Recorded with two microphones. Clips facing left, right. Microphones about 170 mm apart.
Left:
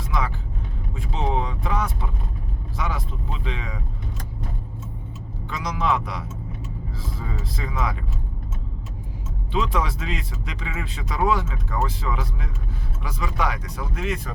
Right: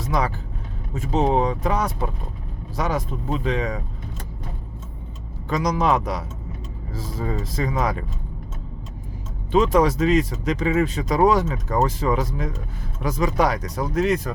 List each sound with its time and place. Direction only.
0.0 s vehicle: 40° right (ahead or behind)
0.9 s speech: 45° right (ahead or behind)
5.5 s speech: 40° right (ahead or behind)
9.5 s speech: 40° right (ahead or behind)